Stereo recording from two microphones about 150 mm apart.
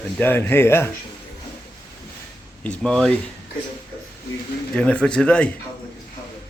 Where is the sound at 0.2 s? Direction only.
15° left (ahead or behind).